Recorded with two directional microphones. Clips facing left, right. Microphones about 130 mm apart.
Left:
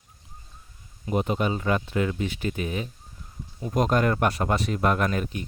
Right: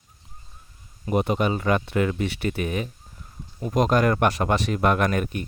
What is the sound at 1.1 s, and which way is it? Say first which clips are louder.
Speech: right 3 dB; 70° right (ahead or behind).